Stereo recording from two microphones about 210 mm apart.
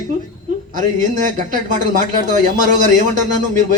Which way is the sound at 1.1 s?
40° right (ahead or behind).